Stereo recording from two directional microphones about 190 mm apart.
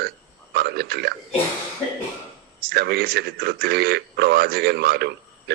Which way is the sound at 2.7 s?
55° right (ahead or behind).